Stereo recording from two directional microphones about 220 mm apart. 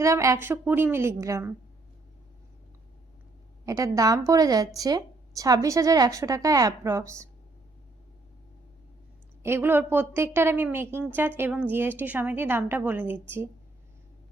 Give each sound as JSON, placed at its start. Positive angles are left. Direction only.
{"t": 0.0, "sound": "a woman's voice", "side_deg": -15}
{"t": 3.7, "sound": "a woman's voice", "side_deg": -15}
{"t": 9.4, "sound": "a woman's voice", "side_deg": -10}